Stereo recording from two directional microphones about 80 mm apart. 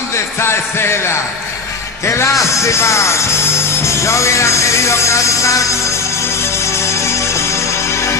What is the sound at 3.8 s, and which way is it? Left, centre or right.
Music, left.